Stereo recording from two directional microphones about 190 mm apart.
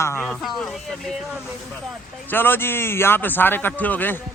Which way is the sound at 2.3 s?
10° left (ahead or behind).